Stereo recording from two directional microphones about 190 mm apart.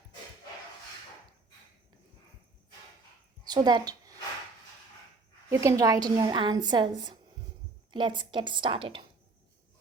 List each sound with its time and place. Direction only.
3.4 s a woman's voice: 20° right (ahead or behind)
5.5 s a woman's voice: 15° right (ahead or behind)
7.9 s a woman's voice: 25° right (ahead or behind)